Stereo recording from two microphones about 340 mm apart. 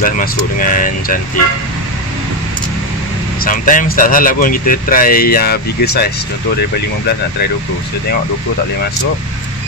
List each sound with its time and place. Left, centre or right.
0.0 s speech: left
3.4 s speech: left